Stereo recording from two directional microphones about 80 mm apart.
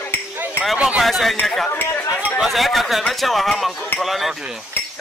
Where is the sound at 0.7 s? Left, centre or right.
Centre.